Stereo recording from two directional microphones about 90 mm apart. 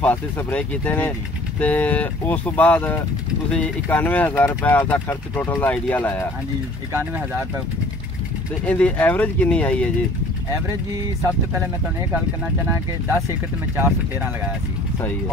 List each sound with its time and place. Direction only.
0.0 s speech: 20° left (ahead or behind)
6.9 s speech: 25° right (ahead or behind)
8.6 s speech: 15° left (ahead or behind)
13.7 s speech: 25° right (ahead or behind)